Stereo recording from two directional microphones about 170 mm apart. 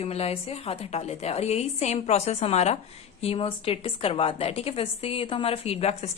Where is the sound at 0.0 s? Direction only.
35° left (ahead or behind).